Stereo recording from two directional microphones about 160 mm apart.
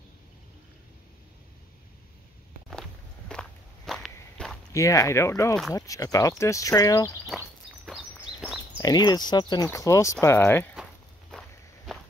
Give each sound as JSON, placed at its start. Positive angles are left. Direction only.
{"t": 3.3, "sound": "walk", "side_deg": 5}
{"t": 4.7, "sound": "speech", "side_deg": 20}
{"t": 7.8, "sound": "a sound", "side_deg": -5}
{"t": 8.7, "sound": "speech", "side_deg": 25}
{"t": 11.3, "sound": "walk", "side_deg": 0}